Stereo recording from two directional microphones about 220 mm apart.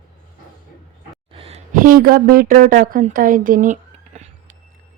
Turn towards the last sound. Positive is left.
turn(degrees=-30)  # may be behind; listen again after turning